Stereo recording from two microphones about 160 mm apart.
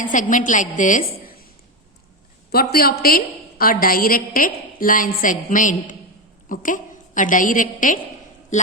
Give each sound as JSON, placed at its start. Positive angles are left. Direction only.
{"t": 0.0, "sound": "a woman's voice", "side_deg": 55}
{"t": 2.5, "sound": "a woman's voice", "side_deg": 75}